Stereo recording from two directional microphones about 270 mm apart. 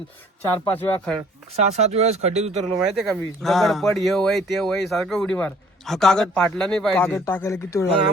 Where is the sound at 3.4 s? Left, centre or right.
Centre.